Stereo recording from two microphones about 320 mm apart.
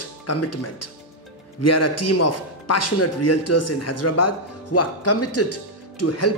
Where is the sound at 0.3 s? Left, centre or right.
Left.